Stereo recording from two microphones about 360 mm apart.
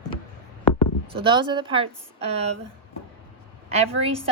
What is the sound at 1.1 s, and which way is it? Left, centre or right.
A woman's voice, centre.